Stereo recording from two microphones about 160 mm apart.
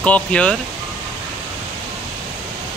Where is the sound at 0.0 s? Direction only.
10° left (ahead or behind).